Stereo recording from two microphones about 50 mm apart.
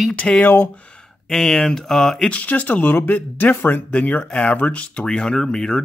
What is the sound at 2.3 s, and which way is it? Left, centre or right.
Speech, left.